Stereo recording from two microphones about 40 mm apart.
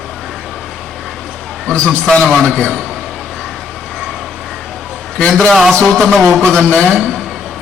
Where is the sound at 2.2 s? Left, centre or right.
Centre.